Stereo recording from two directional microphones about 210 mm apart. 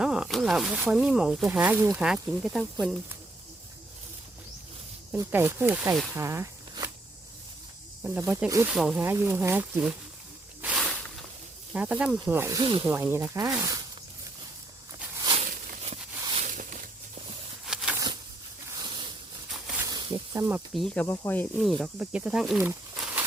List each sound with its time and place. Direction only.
0.0 s speech: 5° right (ahead or behind)
5.1 s speech: 10° right (ahead or behind)
6.2 s a sound: 15° right (ahead or behind)
8.0 s speech: 10° right (ahead or behind)
8.7 s speech: centre (ahead or behind)
10.6 s snake: centre (ahead or behind)
11.7 s speech: 5° right (ahead or behind)
15.2 s a sound: 30° right (ahead or behind)
17.7 s a sound: 5° right (ahead or behind)
18.8 s a sound: 20° right (ahead or behind)
19.8 s snake: 20° right (ahead or behind)
20.7 s speech: 5° left (ahead or behind)